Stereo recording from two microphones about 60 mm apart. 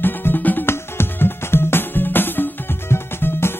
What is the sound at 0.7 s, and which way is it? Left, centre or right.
Music, left.